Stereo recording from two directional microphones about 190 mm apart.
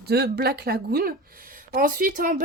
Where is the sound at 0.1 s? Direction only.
60° right (ahead or behind).